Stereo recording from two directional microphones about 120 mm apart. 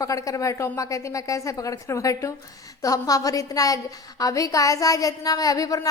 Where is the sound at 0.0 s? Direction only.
30° left (ahead or behind).